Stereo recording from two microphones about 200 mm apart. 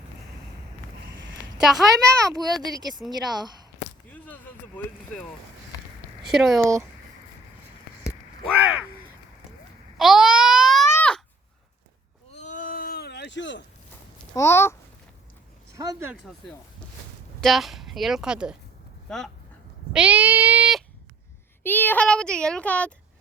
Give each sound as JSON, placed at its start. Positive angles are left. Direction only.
{"t": 1.6, "sound": "speech", "side_deg": 0}
{"t": 2.5, "sound": "speech", "side_deg": -20}
{"t": 6.2, "sound": "speech", "side_deg": 0}
{"t": 6.6, "sound": "speech", "side_deg": -15}
{"t": 8.4, "sound": "speech", "side_deg": -5}
{"t": 10.0, "sound": "babbling", "side_deg": -5}
{"t": 10.9, "sound": "a sound", "side_deg": 5}
{"t": 12.3, "sound": "a sound", "side_deg": 35}
{"t": 14.3, "sound": "speech", "side_deg": 15}
{"t": 15.7, "sound": "speech", "side_deg": -15}
{"t": 17.4, "sound": "speech", "side_deg": 0}
{"t": 19.9, "sound": "cat", "side_deg": -5}
{"t": 21.6, "sound": "speech", "side_deg": 10}